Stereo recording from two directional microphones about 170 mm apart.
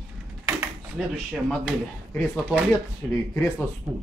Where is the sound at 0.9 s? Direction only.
Centre (ahead or behind).